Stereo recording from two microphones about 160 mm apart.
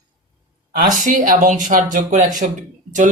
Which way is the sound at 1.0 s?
60° right (ahead or behind).